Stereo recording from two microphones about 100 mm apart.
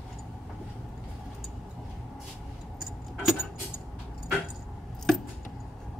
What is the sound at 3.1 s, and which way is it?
Keys jangling, 5° right (ahead or behind).